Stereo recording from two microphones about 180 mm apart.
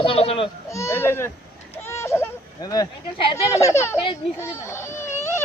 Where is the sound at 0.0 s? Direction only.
30° left (ahead or behind).